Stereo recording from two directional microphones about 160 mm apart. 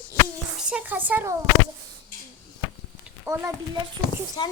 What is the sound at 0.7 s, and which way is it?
Speech, 10° right (ahead or behind).